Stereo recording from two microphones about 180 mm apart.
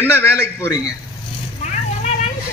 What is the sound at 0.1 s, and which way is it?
Speech, 15° left (ahead or behind).